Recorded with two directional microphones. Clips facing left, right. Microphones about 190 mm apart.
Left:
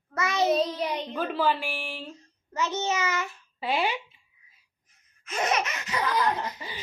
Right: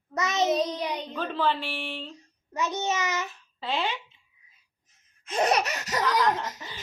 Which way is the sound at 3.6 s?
10° left (ahead or behind).